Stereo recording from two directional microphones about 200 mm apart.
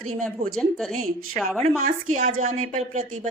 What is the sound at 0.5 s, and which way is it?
Speech, 5° left (ahead or behind).